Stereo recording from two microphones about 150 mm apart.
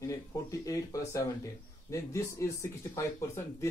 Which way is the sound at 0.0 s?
20° left (ahead or behind).